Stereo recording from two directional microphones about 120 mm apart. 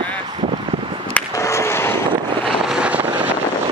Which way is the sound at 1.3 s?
25° left (ahead or behind).